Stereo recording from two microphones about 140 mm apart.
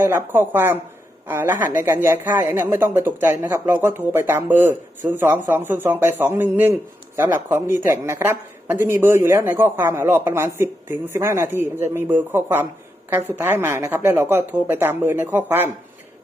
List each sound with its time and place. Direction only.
0.0 s speech: 15° right (ahead or behind)